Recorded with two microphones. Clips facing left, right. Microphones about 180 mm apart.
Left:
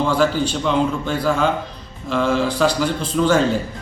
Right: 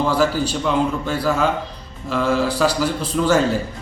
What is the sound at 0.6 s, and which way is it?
A man's voice, 5° right (ahead or behind).